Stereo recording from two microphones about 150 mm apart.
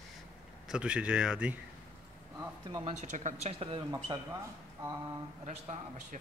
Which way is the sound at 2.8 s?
55° right (ahead or behind).